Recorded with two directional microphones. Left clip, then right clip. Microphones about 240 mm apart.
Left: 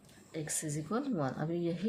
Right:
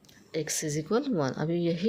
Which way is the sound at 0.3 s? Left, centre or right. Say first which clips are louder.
Right 8 dB; right.